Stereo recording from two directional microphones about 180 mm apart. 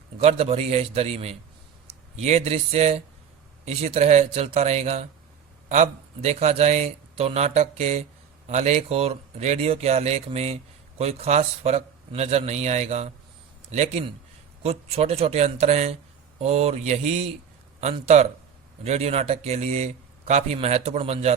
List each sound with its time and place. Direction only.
0.2 s a man's voice: 35° right (ahead or behind)